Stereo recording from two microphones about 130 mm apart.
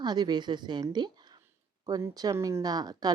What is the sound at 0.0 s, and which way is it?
A woman's voice, 35° right (ahead or behind).